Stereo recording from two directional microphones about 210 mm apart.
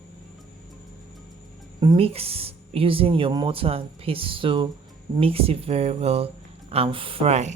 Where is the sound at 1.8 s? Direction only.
25° right (ahead or behind).